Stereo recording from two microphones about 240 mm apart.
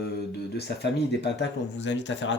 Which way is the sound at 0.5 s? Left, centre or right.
Left.